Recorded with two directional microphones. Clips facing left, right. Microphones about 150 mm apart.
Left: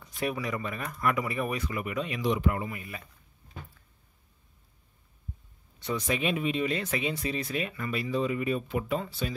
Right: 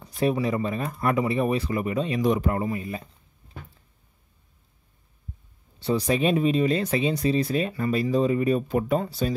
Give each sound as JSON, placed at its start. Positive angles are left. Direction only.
{"t": 0.0, "sound": "speech", "side_deg": -30}
{"t": 2.2, "sound": "speech", "side_deg": -45}
{"t": 5.8, "sound": "speech", "side_deg": -35}